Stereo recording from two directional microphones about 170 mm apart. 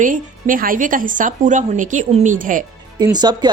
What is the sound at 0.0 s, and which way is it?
A woman's voice, 50° right (ahead or behind).